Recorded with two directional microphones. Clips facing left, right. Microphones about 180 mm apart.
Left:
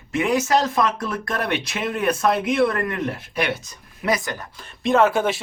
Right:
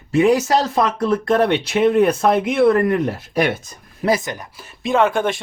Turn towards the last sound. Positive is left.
turn(degrees=5)  # may be behind; listen again after turning